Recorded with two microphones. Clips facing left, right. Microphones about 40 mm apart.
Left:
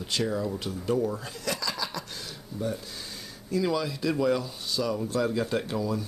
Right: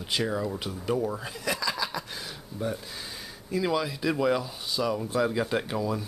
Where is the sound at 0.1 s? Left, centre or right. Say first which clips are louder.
Even; centre.